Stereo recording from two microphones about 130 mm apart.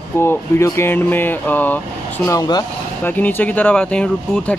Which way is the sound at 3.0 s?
15° left (ahead or behind).